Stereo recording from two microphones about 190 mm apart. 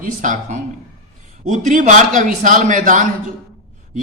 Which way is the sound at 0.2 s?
40° right (ahead or behind).